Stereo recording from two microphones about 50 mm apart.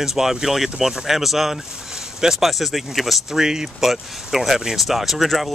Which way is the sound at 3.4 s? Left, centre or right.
Centre.